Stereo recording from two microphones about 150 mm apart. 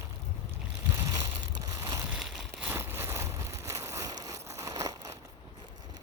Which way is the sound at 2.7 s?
15° right (ahead or behind).